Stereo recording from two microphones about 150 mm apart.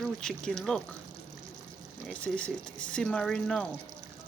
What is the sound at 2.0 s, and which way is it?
Speech, 10° left (ahead or behind).